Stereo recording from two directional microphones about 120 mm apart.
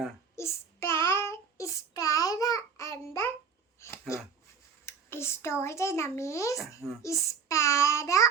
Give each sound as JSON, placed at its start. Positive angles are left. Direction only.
{"t": 0.3, "sound": "child singing", "side_deg": 20}
{"t": 3.8, "sound": "a sound", "side_deg": 20}
{"t": 4.9, "sound": "a child's voice", "side_deg": 20}